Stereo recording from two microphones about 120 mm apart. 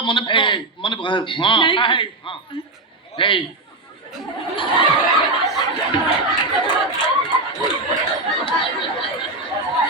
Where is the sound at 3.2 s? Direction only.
45° left (ahead or behind).